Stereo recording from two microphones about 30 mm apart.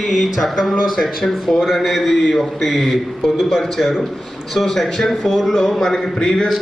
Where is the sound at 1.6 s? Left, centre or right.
Centre.